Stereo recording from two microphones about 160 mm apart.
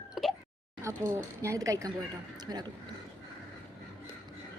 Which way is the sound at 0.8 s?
15° right (ahead or behind).